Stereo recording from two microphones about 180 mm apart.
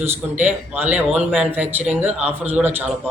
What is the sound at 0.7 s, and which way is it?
Speech, 10° right (ahead or behind).